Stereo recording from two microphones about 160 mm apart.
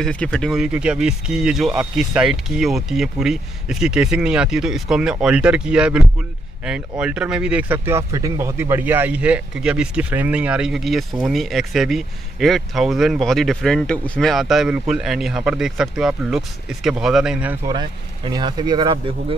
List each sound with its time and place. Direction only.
0.0 s speech: 5° left (ahead or behind)
17.6 s speech: 25° right (ahead or behind)